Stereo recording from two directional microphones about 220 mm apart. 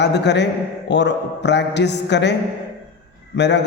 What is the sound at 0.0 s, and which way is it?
A man's voice, 50° left (ahead or behind).